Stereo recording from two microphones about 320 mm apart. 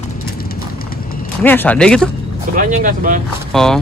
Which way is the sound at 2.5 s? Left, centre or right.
Right.